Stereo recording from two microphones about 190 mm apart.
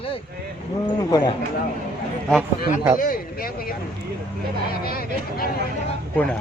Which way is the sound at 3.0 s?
50° left (ahead or behind).